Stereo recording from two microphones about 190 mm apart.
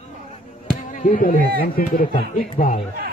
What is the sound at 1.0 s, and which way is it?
Speech, 45° left (ahead or behind).